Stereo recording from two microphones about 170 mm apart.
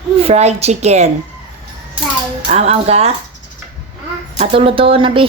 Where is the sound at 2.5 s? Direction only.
40° right (ahead or behind).